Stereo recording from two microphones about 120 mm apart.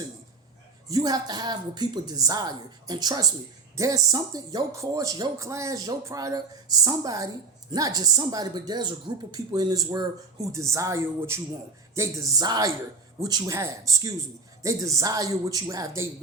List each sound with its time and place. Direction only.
0.9 s a woman's voice: 30° right (ahead or behind)